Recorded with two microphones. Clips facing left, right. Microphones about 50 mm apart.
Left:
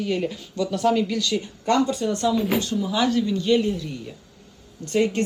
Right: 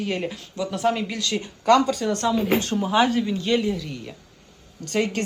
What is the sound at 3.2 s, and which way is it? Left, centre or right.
Speech, centre.